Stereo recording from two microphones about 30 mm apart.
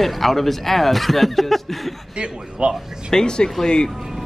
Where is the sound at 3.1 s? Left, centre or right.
Left.